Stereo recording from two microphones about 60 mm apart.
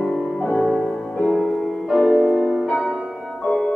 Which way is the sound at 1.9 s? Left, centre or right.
Centre.